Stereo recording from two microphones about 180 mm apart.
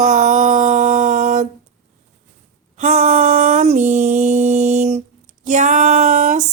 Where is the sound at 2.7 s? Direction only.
40° right (ahead or behind).